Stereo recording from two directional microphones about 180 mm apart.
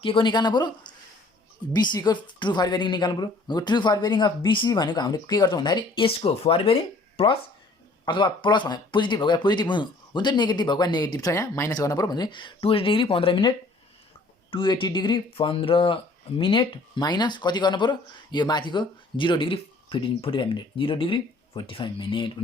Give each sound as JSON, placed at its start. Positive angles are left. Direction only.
{"t": 0.0, "sound": "speech", "side_deg": 25}
{"t": 14.5, "sound": "speech", "side_deg": 25}